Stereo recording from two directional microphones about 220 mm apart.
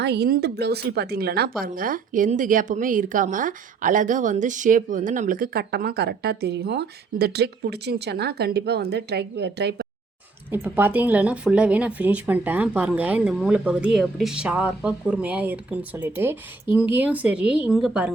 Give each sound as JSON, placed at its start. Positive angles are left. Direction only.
{"t": 0.0, "sound": "a woman's voice", "side_deg": -50}
{"t": 10.5, "sound": "speech", "side_deg": -10}